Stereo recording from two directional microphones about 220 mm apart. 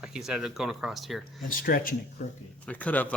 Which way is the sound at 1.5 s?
40° left (ahead or behind).